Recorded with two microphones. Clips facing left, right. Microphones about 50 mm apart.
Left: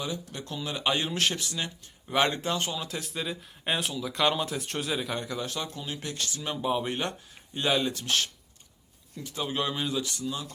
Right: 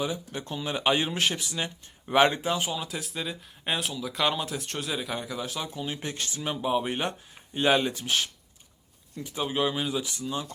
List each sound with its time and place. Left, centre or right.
0.0 s speech: centre
5.8 s speech: right
6.4 s speech: centre
9.1 s speech: centre
10.2 s speech: right